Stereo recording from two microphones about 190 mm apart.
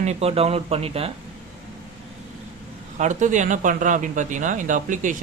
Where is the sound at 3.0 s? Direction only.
40° right (ahead or behind).